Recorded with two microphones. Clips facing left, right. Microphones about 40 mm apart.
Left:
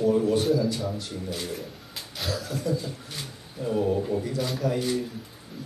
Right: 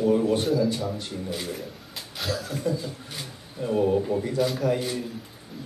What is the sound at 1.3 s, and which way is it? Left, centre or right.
Bird, centre.